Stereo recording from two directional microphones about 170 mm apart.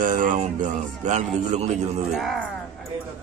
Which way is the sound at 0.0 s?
50° right (ahead or behind).